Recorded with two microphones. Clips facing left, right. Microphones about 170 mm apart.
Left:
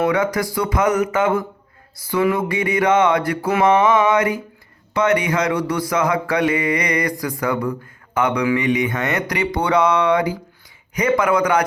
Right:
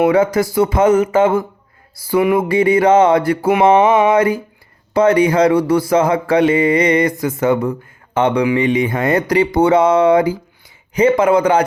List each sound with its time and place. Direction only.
0.1 s mantra: 25° right (ahead or behind)